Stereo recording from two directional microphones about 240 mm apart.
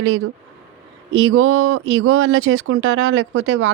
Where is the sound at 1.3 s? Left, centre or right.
Right.